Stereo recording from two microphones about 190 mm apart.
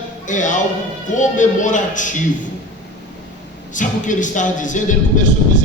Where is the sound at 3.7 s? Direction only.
40° left (ahead or behind).